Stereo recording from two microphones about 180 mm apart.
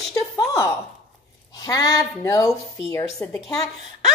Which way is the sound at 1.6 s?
20° left (ahead or behind).